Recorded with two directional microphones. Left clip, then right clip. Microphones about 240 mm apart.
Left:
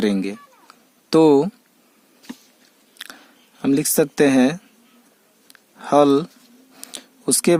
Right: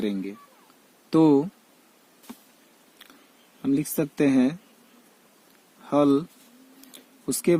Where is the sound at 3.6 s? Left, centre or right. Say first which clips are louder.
Left 8 dB; left.